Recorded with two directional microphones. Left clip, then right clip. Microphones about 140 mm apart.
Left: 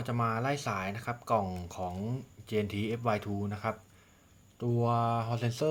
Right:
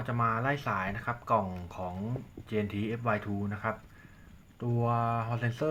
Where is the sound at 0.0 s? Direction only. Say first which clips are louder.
Right 2 dB; 25° left (ahead or behind).